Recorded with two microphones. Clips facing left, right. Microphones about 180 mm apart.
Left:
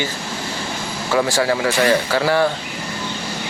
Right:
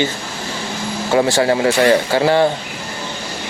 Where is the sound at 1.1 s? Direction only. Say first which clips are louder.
Right 3 dB; 25° right (ahead or behind).